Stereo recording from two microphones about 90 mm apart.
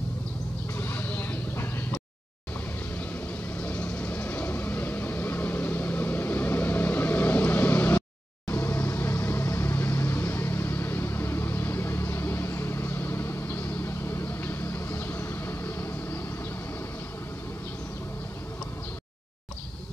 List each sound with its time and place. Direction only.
0.7 s vehicle: 25° left (ahead or behind)
3.6 s vehicle: 20° left (ahead or behind)